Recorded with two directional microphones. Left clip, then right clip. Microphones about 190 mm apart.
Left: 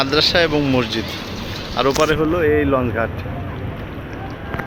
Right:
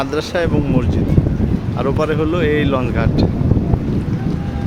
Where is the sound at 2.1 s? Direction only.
20° right (ahead or behind).